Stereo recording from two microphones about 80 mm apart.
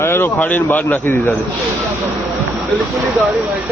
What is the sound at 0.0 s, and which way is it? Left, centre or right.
Speech, left.